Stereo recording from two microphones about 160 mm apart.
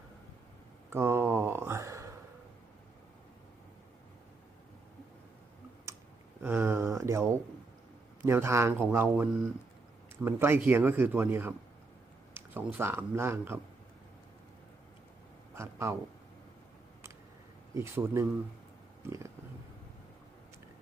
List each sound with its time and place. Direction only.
0.9 s a sound: 15° right (ahead or behind)
6.4 s speech: 15° right (ahead or behind)
15.5 s speech: 15° right (ahead or behind)
17.7 s speech: 15° right (ahead or behind)